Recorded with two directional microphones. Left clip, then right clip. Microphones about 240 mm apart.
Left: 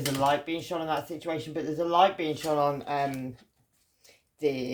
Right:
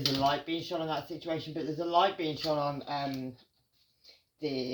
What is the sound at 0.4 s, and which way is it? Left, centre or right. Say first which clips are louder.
Speech: left 3 dB; left.